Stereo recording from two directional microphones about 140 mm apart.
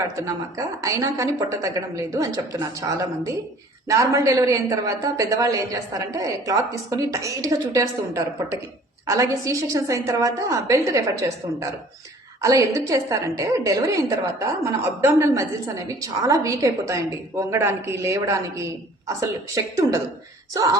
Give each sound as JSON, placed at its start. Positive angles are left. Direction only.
{"t": 0.2, "sound": "a woman's voice", "side_deg": -25}